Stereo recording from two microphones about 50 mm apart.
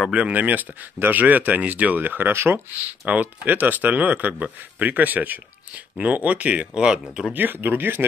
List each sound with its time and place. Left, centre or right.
0.1 s speech: right
2.3 s speech: right
3.1 s speech: right; by 7.0 s centre
7.3 s speech: right